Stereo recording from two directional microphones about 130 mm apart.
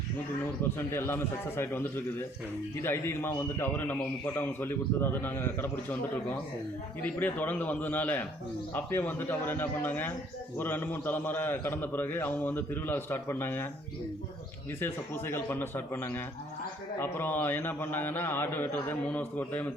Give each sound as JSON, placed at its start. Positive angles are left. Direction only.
{"t": 0.9, "sound": "a man's voice", "side_deg": 15}
{"t": 7.0, "sound": "a man's voice", "side_deg": 10}
{"t": 15.3, "sound": "a man's voice", "side_deg": 15}